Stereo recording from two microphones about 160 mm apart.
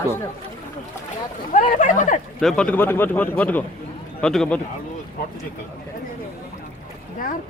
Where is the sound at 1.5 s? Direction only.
50° left (ahead or behind).